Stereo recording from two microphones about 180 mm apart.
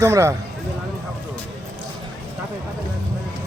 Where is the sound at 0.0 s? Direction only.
15° right (ahead or behind).